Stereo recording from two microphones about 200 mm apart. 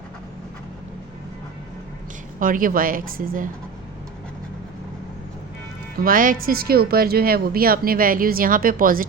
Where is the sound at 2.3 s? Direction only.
45° right (ahead or behind).